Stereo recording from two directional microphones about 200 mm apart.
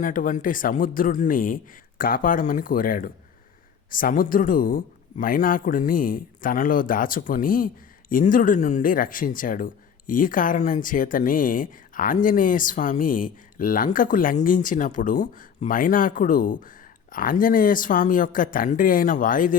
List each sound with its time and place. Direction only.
0.0 s speech: 40° left (ahead or behind)